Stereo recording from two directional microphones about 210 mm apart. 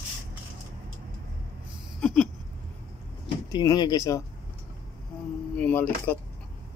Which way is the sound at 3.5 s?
20° left (ahead or behind).